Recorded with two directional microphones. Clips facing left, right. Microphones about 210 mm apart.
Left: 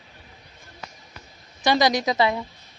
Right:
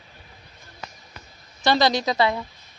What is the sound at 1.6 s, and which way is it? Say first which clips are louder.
Speech: even; 15° left (ahead or behind).